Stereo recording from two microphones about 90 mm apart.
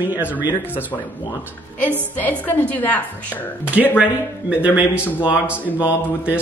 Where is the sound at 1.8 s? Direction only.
15° left (ahead or behind).